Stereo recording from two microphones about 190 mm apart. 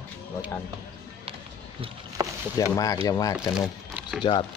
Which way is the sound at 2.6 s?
20° left (ahead or behind).